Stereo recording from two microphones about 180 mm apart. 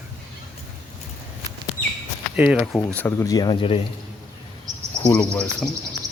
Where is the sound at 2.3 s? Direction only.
5° right (ahead or behind).